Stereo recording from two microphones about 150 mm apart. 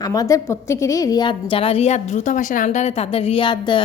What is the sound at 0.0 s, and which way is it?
A woman's voice, 25° left (ahead or behind).